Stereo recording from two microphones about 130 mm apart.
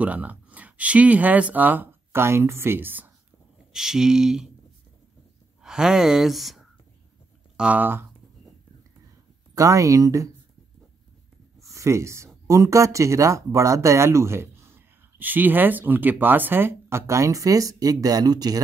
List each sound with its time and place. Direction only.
0.0 s speech: 10° right (ahead or behind)
3.7 s speech: 5° right (ahead or behind)
5.6 s speech: 5° right (ahead or behind)
9.6 s speech: 25° right (ahead or behind)
11.7 s speech: 25° right (ahead or behind)